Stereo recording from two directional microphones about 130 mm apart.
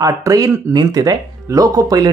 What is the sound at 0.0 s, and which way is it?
Speech, 25° right (ahead or behind).